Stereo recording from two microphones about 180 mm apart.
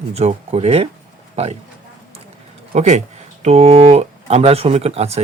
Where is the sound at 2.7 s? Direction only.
40° right (ahead or behind).